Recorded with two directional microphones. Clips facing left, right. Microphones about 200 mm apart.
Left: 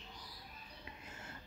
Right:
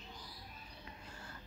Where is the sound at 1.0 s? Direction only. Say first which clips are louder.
Even; 20° left (ahead or behind).